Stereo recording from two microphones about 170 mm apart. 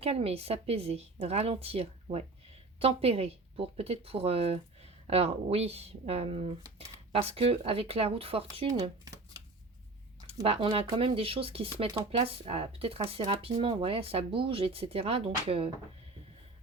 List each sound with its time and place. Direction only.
0.0 s speech: 35° right (ahead or behind)
10.4 s speech: 35° right (ahead or behind)